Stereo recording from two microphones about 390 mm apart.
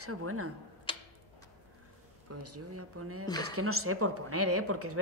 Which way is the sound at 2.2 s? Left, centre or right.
Right.